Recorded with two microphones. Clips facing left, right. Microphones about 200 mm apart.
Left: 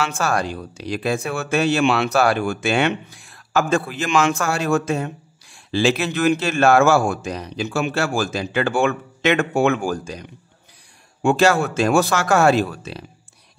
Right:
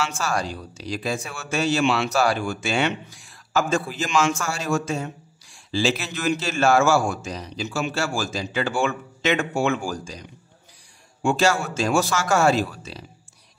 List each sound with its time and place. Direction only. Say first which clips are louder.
0.0 s speech: left 4 dB; 60° left (ahead or behind)
11.2 s speech: left 4 dB; 60° left (ahead or behind)